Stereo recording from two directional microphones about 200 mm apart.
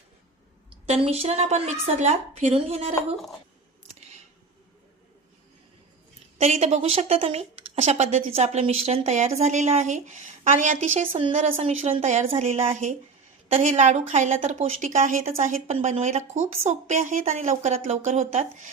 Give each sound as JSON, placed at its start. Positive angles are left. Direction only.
{"t": 0.9, "sound": "a woman's voice", "side_deg": -30}
{"t": 6.4, "sound": "a woman's voice", "side_deg": -35}